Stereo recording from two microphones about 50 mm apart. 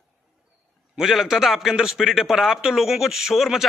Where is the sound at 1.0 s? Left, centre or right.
Centre.